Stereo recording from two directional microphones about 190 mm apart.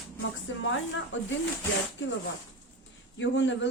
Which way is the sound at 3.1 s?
70° left (ahead or behind).